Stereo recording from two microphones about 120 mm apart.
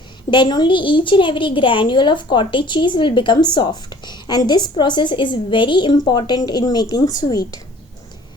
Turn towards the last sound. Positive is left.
turn(degrees=30)  # may be behind; listen again after turning